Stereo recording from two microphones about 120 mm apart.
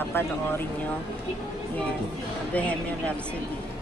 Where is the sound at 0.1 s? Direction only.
20° left (ahead or behind).